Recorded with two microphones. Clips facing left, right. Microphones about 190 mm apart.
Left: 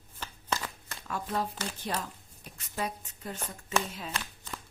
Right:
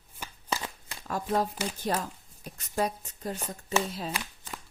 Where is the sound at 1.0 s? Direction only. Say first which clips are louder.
Right 5 dB; 40° right (ahead or behind).